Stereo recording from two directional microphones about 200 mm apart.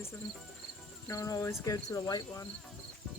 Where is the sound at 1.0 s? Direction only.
15° left (ahead or behind).